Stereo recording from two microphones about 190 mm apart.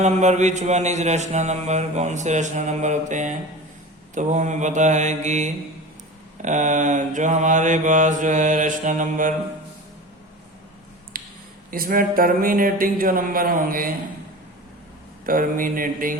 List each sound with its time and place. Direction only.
0.0 s mantra: 40° right (ahead or behind)
11.1 s a sound: 50° right (ahead or behind)
11.7 s speech: 50° right (ahead or behind)
15.3 s speech: 45° right (ahead or behind)